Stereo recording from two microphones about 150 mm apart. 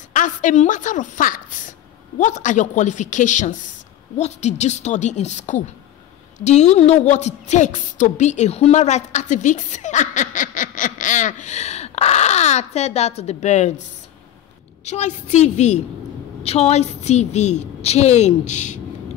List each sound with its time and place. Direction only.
0.1 s a woman's voice: 60° left (ahead or behind)
14.9 s a woman's voice: 50° left (ahead or behind)